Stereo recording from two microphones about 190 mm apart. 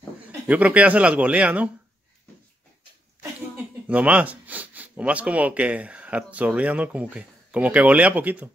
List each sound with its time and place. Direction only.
0.3 s speech: 10° right (ahead or behind)
3.8 s speech: 5° right (ahead or behind)